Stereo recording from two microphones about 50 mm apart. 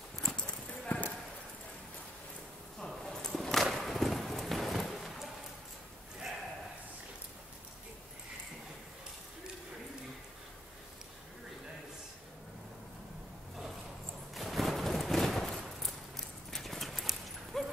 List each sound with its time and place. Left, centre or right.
0.2 s clip-clop: centre
0.7 s clip-clop: left
3.0 s vehicle: centre
3.7 s a sound: centre
14.3 s a sound: centre
16.5 s clip-clop: centre